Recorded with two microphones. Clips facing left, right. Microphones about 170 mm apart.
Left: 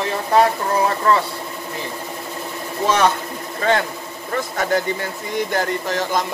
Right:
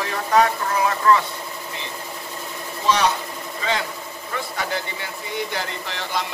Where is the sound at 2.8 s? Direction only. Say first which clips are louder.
Left 3 dB; 50° left (ahead or behind).